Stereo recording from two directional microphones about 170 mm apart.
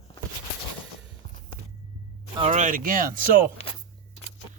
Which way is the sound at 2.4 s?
45° right (ahead or behind).